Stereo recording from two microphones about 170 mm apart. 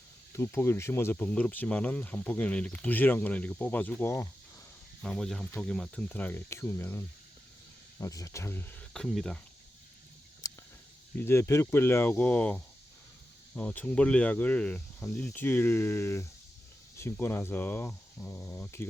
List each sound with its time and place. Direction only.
0.3 s speech: 15° left (ahead or behind)
5.0 s speech: 5° left (ahead or behind)
10.4 s a sound: 20° left (ahead or behind)
11.3 s speech: 15° left (ahead or behind)